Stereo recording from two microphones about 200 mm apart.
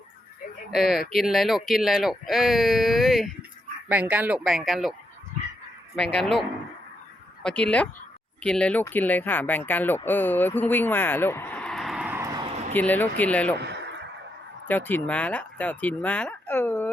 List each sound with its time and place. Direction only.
0.7 s speech: centre (ahead or behind)
6.0 s speech: 5° left (ahead or behind)
7.4 s speech: 5° left (ahead or behind); by 12.5 s 15° right (ahead or behind)
12.7 s speech: 10° left (ahead or behind)
13.6 s a sound: 60° right (ahead or behind)
14.7 s speech: 10° left (ahead or behind)